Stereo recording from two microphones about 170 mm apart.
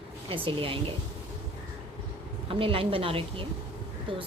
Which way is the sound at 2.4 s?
35° right (ahead or behind).